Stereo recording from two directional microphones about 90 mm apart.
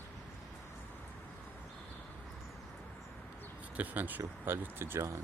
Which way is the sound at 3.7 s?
20° right (ahead or behind).